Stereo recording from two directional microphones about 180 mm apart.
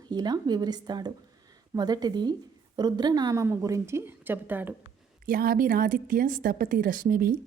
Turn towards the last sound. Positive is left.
turn(degrees=-55)  # may be behind; listen again after turning